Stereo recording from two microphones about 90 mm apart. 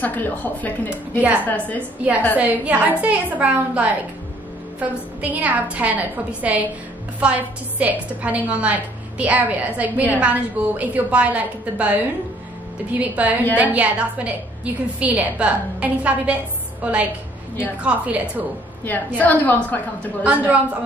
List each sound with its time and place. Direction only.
0.0 s a woman's voice: 20° left (ahead or behind)
1.8 s a woman's voice: 20° right (ahead or behind)
13.0 s a woman's voice: 15° right (ahead or behind)
18.9 s a woman's voice: 20° left (ahead or behind)
20.2 s a woman's voice: 15° right (ahead or behind)